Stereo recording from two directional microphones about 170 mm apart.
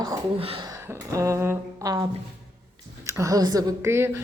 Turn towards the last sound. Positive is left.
turn(degrees=-15)  # may be behind; listen again after turning